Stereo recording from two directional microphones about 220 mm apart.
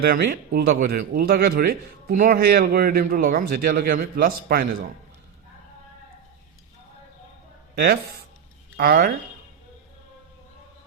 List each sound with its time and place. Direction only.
0.0 s speech: 45° right (ahead or behind)
7.8 s speech: 45° right (ahead or behind)